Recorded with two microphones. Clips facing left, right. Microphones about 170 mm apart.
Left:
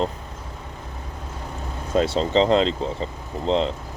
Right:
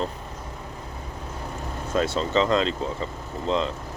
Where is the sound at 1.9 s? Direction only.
30° left (ahead or behind).